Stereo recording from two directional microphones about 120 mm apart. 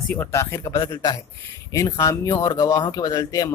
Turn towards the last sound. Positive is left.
turn(degrees=30)  # may be behind; listen again after turning